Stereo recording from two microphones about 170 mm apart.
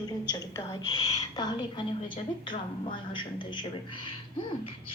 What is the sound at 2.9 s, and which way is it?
A woman's voice, 30° left (ahead or behind).